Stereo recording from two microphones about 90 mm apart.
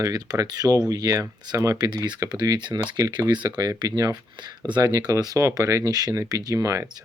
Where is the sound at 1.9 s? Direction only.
55° right (ahead or behind).